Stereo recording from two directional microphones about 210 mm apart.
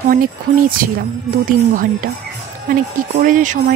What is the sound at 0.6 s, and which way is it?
Speech, 40° right (ahead or behind).